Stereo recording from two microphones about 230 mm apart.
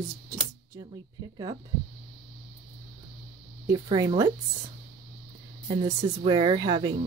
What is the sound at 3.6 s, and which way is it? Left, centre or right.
Speech, centre.